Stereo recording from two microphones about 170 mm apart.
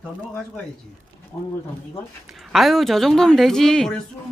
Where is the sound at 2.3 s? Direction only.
Centre (ahead or behind).